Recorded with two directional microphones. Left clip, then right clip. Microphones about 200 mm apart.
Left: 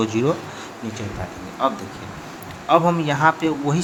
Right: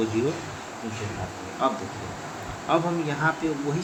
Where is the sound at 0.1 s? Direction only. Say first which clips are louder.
Left 6 dB; 50° left (ahead or behind).